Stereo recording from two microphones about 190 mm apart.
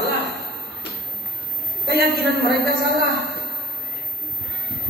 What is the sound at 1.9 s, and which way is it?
Speech, 55° right (ahead or behind).